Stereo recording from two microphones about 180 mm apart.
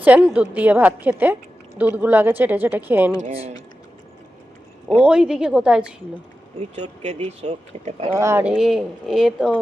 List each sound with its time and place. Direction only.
0.0 s a woman's voice: 10° right (ahead or behind)
3.2 s speech: 35° right (ahead or behind)
4.9 s speech: 5° right (ahead or behind)
6.6 s speech: 40° right (ahead or behind)
8.1 s speech: 15° right (ahead or behind)